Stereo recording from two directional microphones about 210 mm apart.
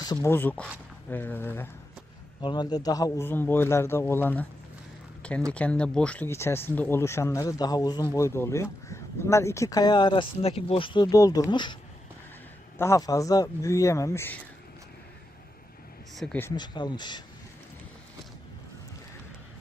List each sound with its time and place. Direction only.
0.0 s speech: 20° left (ahead or behind)
2.4 s speech: 20° left (ahead or behind)
5.5 s speech: 5° left (ahead or behind); by 11.8 s 20° left (ahead or behind)
12.8 s speech: 15° left (ahead or behind)
16.1 s speech: 5° left (ahead or behind)
16.6 s speech: 20° left (ahead or behind)